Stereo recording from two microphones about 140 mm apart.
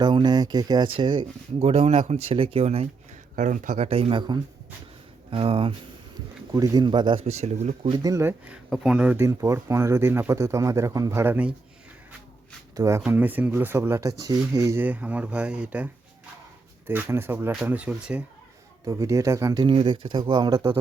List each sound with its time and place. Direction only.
0.0 s speech: 30° right (ahead or behind)
1.6 s speech: 45° right (ahead or behind)
3.3 s speech: 65° right (ahead or behind)
3.8 s speech: 45° right (ahead or behind)
6.5 s speech: 30° right (ahead or behind)
7.3 s speech: 50° right (ahead or behind)
7.9 s speech: 25° right (ahead or behind)
8.7 s speech: 5° right (ahead or behind)
12.7 s speech: 20° right (ahead or behind)
13.1 s speech: 10° right (ahead or behind)
18.9 s speech: 25° right (ahead or behind)
19.6 s speech: 35° right (ahead or behind)